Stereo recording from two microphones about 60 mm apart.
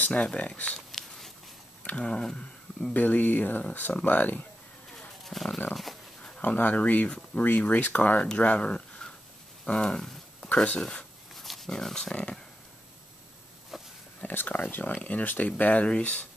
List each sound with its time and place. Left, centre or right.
0.0 s speech: left
0.7 s a sound: centre
1.9 s speech: centre
2.9 s speech: left
5.2 s speech: centre
6.4 s speech: left
9.7 s a sound: centre
10.5 s speech: left
11.3 s speech: centre
14.2 s speech: left